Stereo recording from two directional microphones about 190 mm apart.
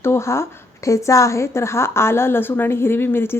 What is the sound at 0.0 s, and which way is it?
Speech, 15° left (ahead or behind).